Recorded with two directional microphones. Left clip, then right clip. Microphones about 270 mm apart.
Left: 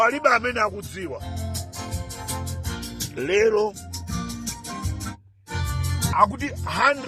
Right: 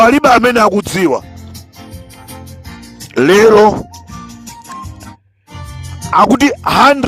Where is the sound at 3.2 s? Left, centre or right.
Right.